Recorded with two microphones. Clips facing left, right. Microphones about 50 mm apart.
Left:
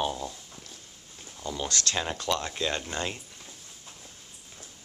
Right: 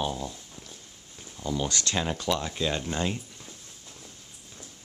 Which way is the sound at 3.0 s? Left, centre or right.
Centre.